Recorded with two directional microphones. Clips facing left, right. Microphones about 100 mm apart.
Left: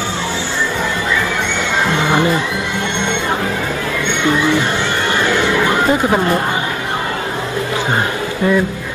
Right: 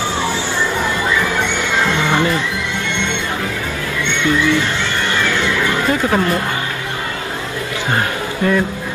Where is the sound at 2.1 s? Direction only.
20° left (ahead or behind).